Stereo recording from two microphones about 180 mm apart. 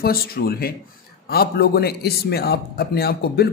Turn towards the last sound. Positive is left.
turn(degrees=60)  # may be behind; listen again after turning